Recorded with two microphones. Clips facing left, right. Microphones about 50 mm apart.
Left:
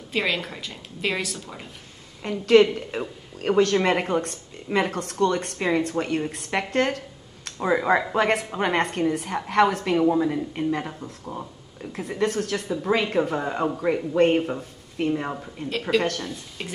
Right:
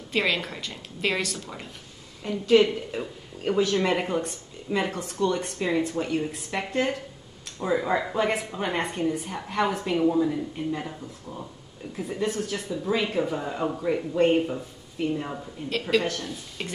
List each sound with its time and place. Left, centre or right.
0.1 s a woman's voice: centre
2.2 s a woman's voice: left
11.9 s a woman's voice: left
14.3 s speech: left
15.0 s a woman's voice: left
16.3 s a woman's voice: centre